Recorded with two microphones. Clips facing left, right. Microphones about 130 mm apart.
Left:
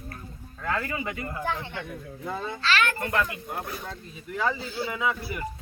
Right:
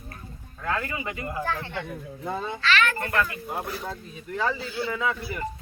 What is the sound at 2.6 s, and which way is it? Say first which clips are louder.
Speech: right 1 dB; 30° left (ahead or behind).